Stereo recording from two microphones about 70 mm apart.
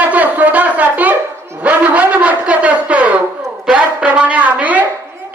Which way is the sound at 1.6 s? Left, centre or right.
Right.